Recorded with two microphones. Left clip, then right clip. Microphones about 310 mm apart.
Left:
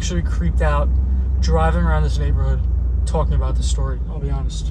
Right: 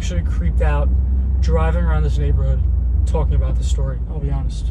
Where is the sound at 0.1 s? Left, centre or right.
Centre.